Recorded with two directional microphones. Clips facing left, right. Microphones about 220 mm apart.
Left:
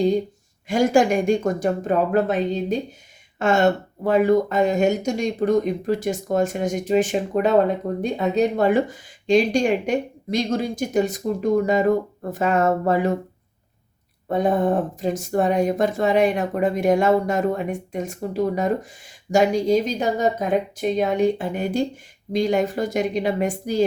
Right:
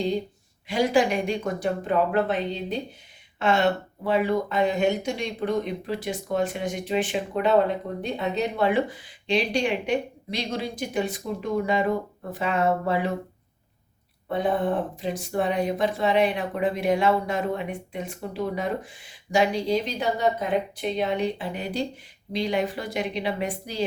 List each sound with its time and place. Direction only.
0.7 s speech: 45° left (ahead or behind)
14.3 s speech: 45° left (ahead or behind)